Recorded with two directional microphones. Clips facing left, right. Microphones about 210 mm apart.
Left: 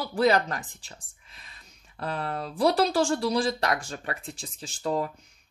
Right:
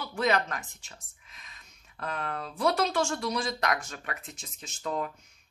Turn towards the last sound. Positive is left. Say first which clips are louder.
# left 5 dB
turn(degrees=30)  # may be behind; listen again after turning